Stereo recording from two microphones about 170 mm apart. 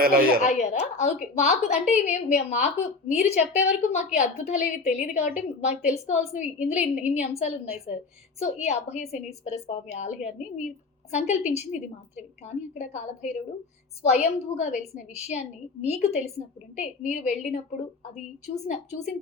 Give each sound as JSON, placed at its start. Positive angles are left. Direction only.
{"t": 0.0, "sound": "speech", "side_deg": -60}
{"t": 0.4, "sound": "a woman's voice", "side_deg": 45}
{"t": 8.6, "sound": "a woman's voice", "side_deg": 40}